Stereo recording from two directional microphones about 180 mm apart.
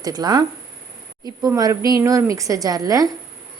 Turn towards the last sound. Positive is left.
turn(degrees=-20)  # may be behind; listen again after turning